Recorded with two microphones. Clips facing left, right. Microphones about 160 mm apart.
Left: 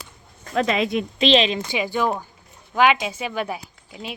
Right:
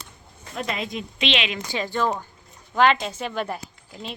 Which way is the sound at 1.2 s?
35° left (ahead or behind).